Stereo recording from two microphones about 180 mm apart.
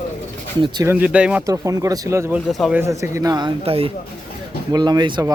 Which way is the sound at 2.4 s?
Centre (ahead or behind).